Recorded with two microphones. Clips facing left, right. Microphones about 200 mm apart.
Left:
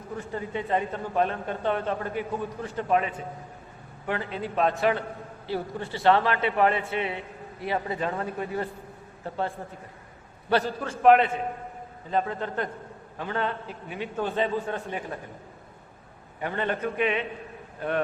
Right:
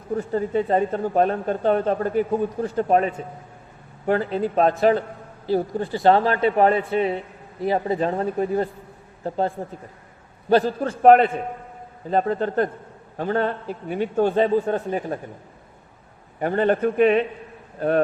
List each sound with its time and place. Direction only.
0.1 s a man's voice: 40° right (ahead or behind)
10.8 s a man's voice: 40° right (ahead or behind)
16.4 s a man's voice: 45° right (ahead or behind)